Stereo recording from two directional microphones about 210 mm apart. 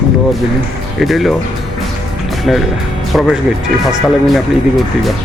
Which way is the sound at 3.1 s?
Centre (ahead or behind).